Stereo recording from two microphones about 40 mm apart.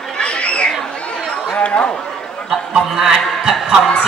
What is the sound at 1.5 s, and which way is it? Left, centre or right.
Speech, left.